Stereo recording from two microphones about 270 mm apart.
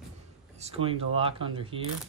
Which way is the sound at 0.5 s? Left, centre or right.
Right.